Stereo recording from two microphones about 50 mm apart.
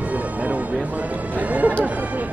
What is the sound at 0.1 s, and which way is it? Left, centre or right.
Music, right.